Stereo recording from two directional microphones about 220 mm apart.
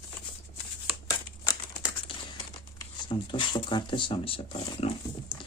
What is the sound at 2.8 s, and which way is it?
Speech, 20° left (ahead or behind).